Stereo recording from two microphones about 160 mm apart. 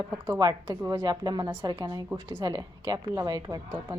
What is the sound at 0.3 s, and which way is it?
Speech, 25° right (ahead or behind).